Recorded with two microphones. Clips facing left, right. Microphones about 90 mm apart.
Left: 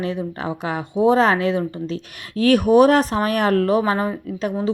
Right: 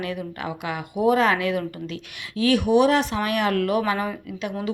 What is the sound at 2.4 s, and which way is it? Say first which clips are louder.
Speech: left 5 dB; 45° left (ahead or behind).